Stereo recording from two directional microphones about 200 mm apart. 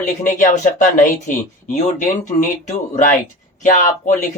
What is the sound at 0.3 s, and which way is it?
Speech, 40° left (ahead or behind).